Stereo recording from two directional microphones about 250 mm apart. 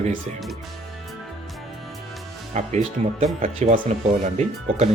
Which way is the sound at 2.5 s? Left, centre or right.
Right.